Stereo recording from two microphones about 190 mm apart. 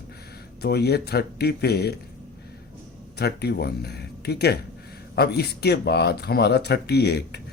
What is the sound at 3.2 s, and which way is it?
Speech, 60° left (ahead or behind).